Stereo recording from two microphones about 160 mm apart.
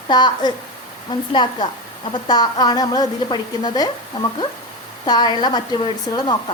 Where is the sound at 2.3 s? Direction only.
25° left (ahead or behind).